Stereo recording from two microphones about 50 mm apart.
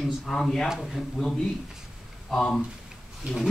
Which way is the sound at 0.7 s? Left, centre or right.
Centre.